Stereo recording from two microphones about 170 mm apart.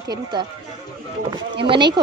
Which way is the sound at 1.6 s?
25° right (ahead or behind).